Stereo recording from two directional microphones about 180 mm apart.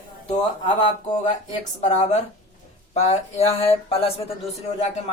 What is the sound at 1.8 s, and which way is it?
A man's voice, 40° left (ahead or behind).